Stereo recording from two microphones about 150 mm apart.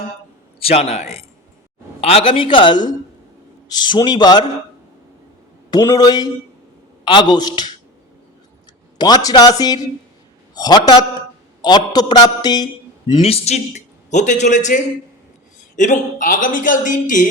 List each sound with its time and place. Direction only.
0.6 s a man's voice: 40° left (ahead or behind)
5.7 s a man's voice: 25° left (ahead or behind)
9.0 s a man's voice: 25° left (ahead or behind)
13.2 s a man's voice: 45° left (ahead or behind)